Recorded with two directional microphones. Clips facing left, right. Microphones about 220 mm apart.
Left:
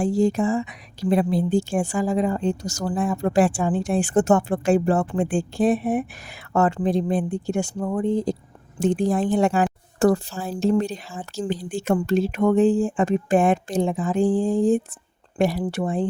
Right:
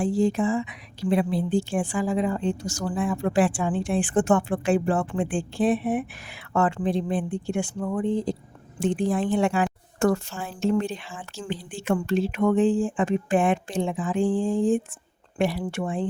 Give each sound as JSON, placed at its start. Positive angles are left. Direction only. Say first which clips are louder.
{"t": 0.0, "sound": "a woman's voice", "louder": "left 2 dB", "side_deg": 40}